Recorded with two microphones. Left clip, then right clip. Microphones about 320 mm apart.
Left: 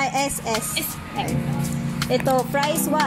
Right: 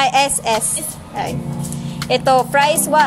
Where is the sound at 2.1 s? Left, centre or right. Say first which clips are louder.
Right 7 dB; right.